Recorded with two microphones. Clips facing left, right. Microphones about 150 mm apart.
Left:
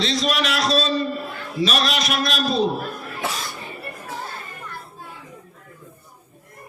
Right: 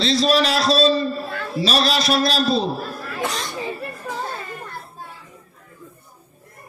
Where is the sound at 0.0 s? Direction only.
35° right (ahead or behind).